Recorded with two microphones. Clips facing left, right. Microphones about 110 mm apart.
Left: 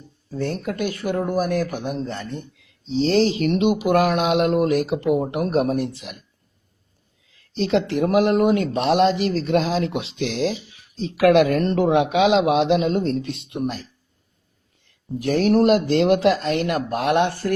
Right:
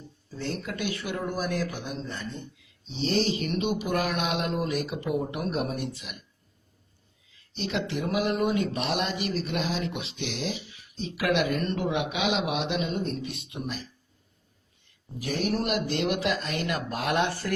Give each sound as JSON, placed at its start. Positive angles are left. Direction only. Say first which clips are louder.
{"t": 0.3, "sound": "speech", "louder": "left 8 dB", "side_deg": 50}
{"t": 3.0, "sound": "speech", "louder": "left 8 dB", "side_deg": 90}
{"t": 7.5, "sound": "a man's voice", "louder": "left 10 dB", "side_deg": 90}
{"t": 8.4, "sound": "speech", "louder": "left 8 dB", "side_deg": 65}
{"t": 9.0, "sound": "a man's voice", "louder": "left 11 dB", "side_deg": 90}
{"t": 13.5, "sound": "speech", "louder": "left 11 dB", "side_deg": 70}
{"t": 15.4, "sound": "speech", "louder": "left 11 dB", "side_deg": 80}
{"t": 15.6, "sound": "speech", "louder": "left 11 dB", "side_deg": 35}
{"t": 16.3, "sound": "speech", "louder": "left 8 dB", "side_deg": 80}